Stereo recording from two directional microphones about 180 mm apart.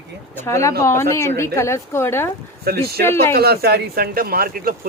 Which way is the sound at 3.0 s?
15° left (ahead or behind).